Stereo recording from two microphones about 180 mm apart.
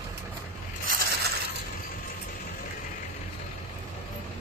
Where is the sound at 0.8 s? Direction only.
50° right (ahead or behind).